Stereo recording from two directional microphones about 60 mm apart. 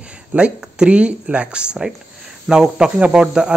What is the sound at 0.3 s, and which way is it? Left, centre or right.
Speech, centre.